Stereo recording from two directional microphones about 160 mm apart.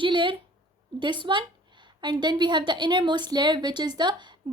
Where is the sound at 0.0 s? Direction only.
30° right (ahead or behind).